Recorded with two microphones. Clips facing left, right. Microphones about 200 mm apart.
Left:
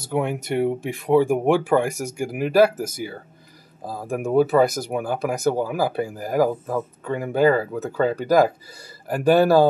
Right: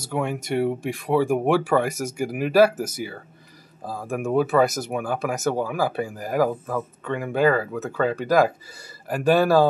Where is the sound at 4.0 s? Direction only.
5° left (ahead or behind).